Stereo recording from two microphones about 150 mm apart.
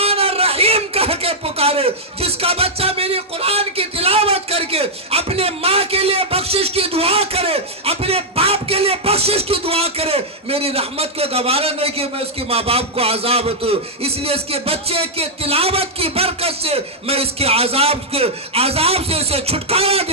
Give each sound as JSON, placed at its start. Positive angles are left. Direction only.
{"t": 0.0, "sound": "speech", "side_deg": -40}